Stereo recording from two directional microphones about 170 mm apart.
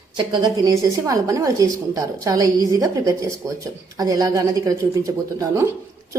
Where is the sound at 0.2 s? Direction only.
25° right (ahead or behind).